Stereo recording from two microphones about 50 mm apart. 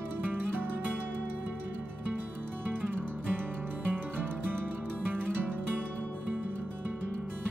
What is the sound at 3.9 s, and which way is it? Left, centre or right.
Music, right.